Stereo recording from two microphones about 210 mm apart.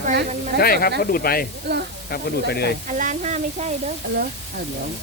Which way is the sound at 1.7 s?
50° right (ahead or behind).